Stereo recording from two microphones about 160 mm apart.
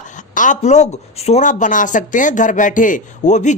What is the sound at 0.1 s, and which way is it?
Speech, 50° left (ahead or behind).